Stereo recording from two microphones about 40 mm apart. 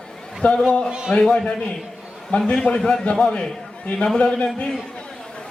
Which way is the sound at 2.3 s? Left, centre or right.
Left.